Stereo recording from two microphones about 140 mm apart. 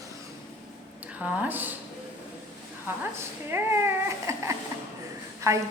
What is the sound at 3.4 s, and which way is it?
A woman's voice, 15° right (ahead or behind).